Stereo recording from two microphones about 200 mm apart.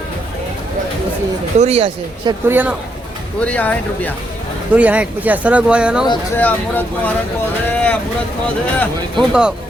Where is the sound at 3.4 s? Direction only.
5° left (ahead or behind).